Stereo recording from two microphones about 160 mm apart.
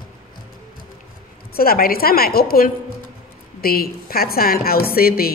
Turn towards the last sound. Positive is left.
turn(degrees=70)  # may be behind; listen again after turning